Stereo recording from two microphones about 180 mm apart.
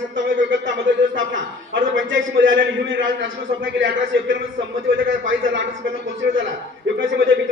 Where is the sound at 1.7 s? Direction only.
90° right.